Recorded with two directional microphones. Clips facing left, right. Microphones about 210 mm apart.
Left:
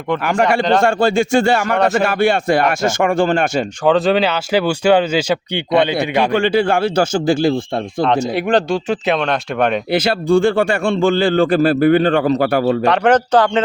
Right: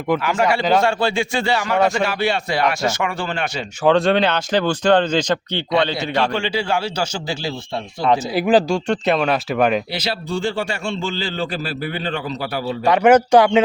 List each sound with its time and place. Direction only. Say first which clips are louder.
0.2 s speech: left 3 dB; 55° left (ahead or behind)
3.8 s speech: left 1 dB; centre (ahead or behind)
6.3 s speech: left 7 dB; 55° left (ahead or behind)
8.0 s speech: even; centre (ahead or behind)
9.9 s speech: left 10 dB; 50° left (ahead or behind)
12.8 s speech: even; 10° right (ahead or behind)